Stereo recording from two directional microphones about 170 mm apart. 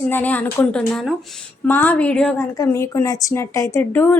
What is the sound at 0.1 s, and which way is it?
A woman's voice, 10° left (ahead or behind).